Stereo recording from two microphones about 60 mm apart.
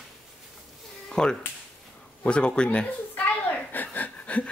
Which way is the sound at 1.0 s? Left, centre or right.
Centre.